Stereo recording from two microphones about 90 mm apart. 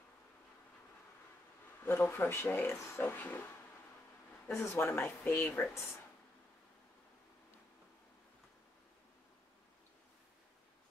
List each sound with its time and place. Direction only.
1.9 s speech: 25° left (ahead or behind)
4.5 s speech: 30° left (ahead or behind)